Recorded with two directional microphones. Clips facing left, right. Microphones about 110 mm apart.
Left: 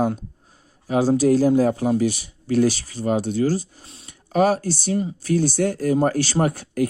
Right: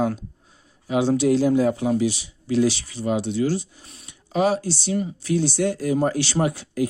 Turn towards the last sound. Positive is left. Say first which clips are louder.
# left 2 dB
turn(degrees=50)  # may be behind; listen again after turning